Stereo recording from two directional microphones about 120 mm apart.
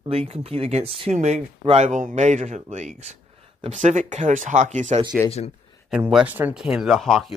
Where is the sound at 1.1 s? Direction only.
75° right (ahead or behind).